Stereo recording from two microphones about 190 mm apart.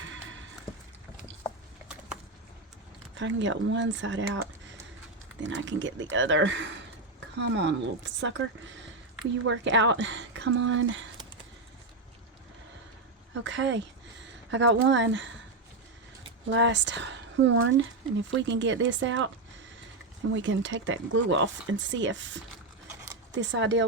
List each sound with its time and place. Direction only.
3.2 s speech: 75° right (ahead or behind); by 11.0 s 90° right
13.4 s speech: 75° right (ahead or behind)
16.5 s speech: 70° right (ahead or behind); by 17.8 s 90° right
18.3 s speech: 75° right (ahead or behind)
20.3 s speech: 80° right